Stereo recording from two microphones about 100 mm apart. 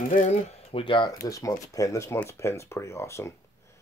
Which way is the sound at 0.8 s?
55° left (ahead or behind).